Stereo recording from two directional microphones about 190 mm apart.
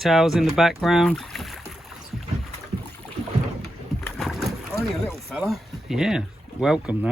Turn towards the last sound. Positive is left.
turn(degrees=-5)  # may be behind; listen again after turning